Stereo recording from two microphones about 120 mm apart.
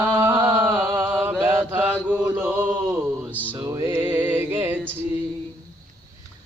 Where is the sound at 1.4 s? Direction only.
20° right (ahead or behind).